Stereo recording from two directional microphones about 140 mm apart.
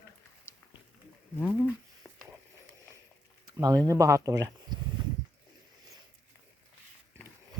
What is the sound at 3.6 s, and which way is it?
Speech, 25° right (ahead or behind).